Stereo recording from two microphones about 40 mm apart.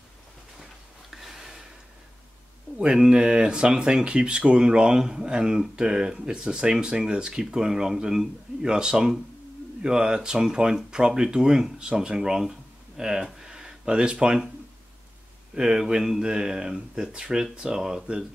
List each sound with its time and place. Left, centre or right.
1.1 s a sound: centre
2.8 s speech: centre
15.5 s speech: centre